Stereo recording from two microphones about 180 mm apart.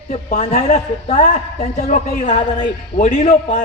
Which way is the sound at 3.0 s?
45° left (ahead or behind).